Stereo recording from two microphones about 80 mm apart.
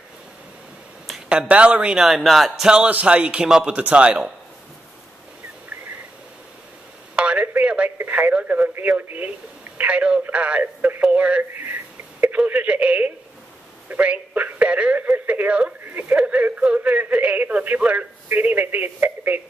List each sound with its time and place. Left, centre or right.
1.5 s a man's voice: centre
2.0 s speech: centre
2.8 s a man's voice: centre
7.2 s a sound: centre
8.0 s radio: centre
9.8 s a sound: centre
11.5 s telephone: right
15.8 s speech: right